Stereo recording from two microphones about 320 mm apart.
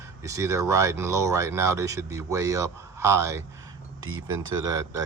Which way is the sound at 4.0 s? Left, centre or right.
Right.